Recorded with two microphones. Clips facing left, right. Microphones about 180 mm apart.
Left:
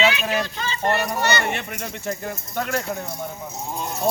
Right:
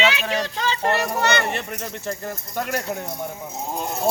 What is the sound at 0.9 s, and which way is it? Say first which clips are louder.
Speech: left 1 dB; centre (ahead or behind).